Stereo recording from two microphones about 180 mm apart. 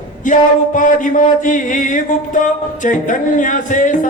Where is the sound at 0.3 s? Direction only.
45° left (ahead or behind).